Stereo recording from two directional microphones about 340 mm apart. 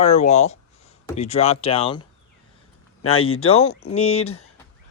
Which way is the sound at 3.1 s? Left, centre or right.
Left.